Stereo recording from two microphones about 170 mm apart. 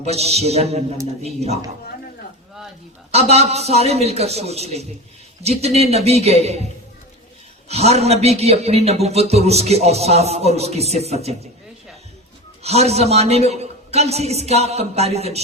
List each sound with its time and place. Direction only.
0.0 s a man's voice: 40° right (ahead or behind)
3.1 s a man's voice: 40° right (ahead or behind)
7.7 s a man's voice: 40° right (ahead or behind)
12.6 s a man's voice: 40° right (ahead or behind)